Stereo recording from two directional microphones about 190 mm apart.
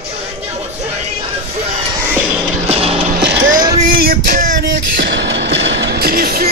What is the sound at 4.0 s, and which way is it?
Male singing, 50° right (ahead or behind).